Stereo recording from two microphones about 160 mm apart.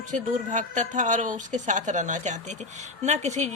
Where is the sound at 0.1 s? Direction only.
50° right (ahead or behind).